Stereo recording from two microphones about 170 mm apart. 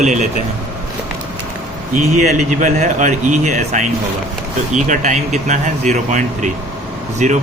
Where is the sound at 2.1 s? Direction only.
45° right (ahead or behind).